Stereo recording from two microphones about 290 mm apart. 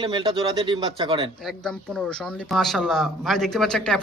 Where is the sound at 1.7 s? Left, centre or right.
Centre.